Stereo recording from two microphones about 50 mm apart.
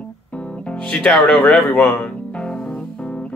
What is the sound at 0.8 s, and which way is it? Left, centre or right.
Speech, centre.